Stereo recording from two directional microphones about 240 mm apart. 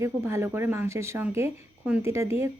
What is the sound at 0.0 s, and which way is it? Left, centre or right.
A woman's voice, centre.